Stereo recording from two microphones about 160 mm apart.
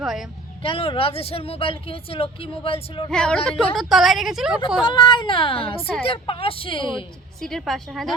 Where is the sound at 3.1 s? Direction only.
5° left (ahead or behind).